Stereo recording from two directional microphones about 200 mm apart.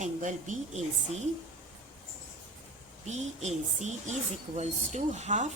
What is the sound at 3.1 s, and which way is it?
A woman's voice, 35° right (ahead or behind).